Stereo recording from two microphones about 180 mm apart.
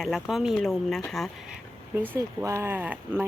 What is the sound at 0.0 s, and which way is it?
Speech, centre (ahead or behind).